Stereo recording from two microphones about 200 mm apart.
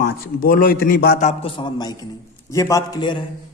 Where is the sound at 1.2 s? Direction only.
30° left (ahead or behind).